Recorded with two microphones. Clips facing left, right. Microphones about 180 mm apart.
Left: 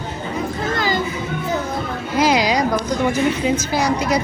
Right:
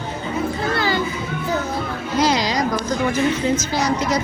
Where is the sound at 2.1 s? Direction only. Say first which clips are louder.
Left 2 dB; 10° left (ahead or behind).